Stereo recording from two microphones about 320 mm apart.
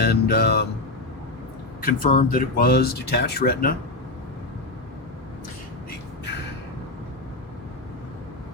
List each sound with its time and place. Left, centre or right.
0.0 s speech: left
1.8 s speech: left